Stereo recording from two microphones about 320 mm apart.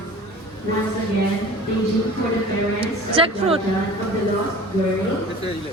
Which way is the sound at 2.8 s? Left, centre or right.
Centre.